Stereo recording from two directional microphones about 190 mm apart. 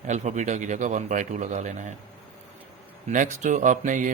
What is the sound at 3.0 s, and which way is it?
Speech, 40° right (ahead or behind).